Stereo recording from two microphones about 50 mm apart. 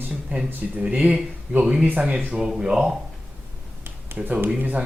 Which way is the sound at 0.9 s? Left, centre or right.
Right.